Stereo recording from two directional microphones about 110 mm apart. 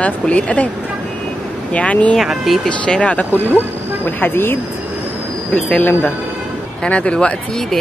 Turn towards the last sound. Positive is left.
turn(degrees=5)  # may be behind; listen again after turning